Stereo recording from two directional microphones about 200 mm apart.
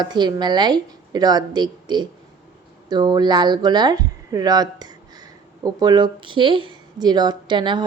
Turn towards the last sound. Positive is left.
turn(degrees=-25)  # may be behind; listen again after turning